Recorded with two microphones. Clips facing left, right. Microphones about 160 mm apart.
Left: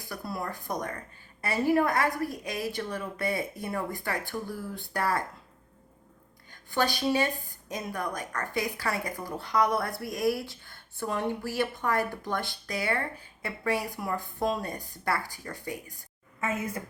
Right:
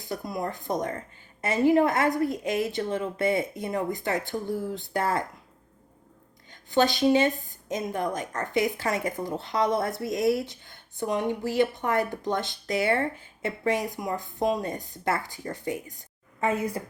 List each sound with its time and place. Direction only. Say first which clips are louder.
0.0 s speech: right 4 dB; 20° right (ahead or behind)
6.5 s speech: right 5 dB; 20° right (ahead or behind)